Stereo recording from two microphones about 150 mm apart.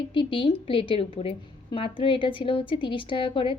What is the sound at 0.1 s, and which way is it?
A woman's voice, 35° left (ahead or behind).